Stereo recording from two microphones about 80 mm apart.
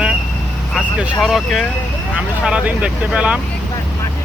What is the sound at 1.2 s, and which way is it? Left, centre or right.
Speech, centre.